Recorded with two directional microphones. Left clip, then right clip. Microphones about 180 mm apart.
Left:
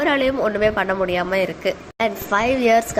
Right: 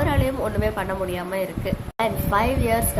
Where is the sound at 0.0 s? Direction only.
15° left (ahead or behind).